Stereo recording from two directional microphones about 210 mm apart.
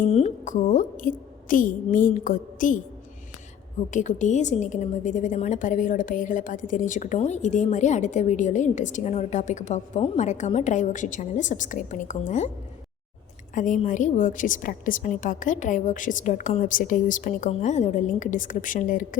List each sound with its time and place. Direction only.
0.0 s a woman's voice: 35° left (ahead or behind)
3.9 s a woman's voice: 35° left (ahead or behind)
13.5 s a woman's voice: 35° left (ahead or behind)